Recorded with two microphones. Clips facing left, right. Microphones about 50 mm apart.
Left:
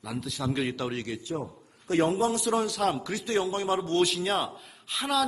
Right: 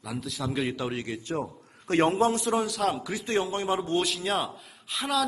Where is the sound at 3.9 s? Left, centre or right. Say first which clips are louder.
Left 1 dB; centre.